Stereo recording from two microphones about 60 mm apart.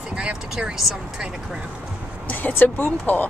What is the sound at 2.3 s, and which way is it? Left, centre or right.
Speech, left.